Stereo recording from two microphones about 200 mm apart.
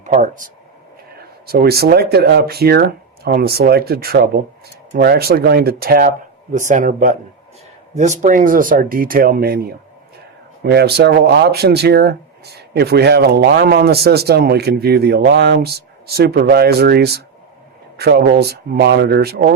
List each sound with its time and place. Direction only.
0.0 s speech: 40° right (ahead or behind)